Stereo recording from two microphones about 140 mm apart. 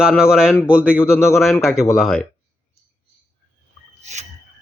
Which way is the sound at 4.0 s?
55° right (ahead or behind).